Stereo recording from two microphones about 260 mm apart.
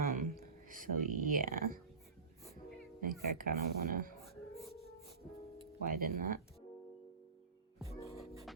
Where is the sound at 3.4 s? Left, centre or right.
Right.